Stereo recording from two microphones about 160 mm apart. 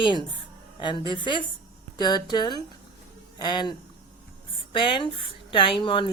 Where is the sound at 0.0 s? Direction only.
30° left (ahead or behind).